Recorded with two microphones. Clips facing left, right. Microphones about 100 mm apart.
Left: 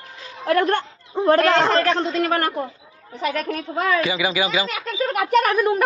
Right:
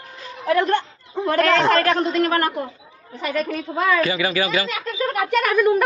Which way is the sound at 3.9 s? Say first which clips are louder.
Right 1 dB; 15° left (ahead or behind).